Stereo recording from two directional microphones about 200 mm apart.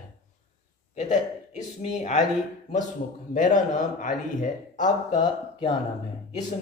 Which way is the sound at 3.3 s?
40° left (ahead or behind).